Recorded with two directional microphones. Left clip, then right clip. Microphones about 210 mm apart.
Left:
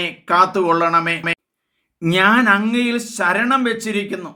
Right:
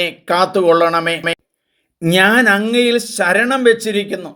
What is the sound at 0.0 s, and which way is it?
Speech, 15° right (ahead or behind).